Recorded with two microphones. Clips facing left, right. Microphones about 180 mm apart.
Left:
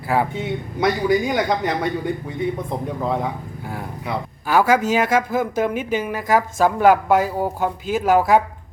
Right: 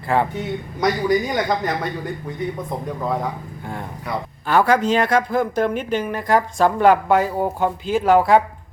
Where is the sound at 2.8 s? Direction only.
5° left (ahead or behind).